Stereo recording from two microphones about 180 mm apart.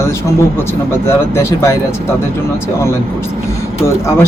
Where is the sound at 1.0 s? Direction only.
15° left (ahead or behind).